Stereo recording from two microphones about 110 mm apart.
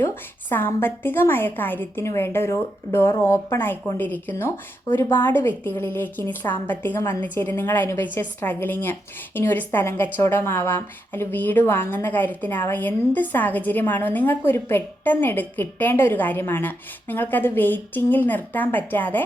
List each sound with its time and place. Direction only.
0.0 s a woman's voice: 20° left (ahead or behind)